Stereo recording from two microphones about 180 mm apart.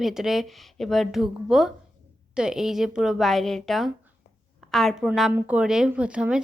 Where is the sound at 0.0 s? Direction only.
Centre (ahead or behind).